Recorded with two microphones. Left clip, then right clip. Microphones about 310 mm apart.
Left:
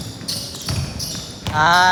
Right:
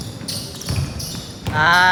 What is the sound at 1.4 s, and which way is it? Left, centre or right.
Speech, centre.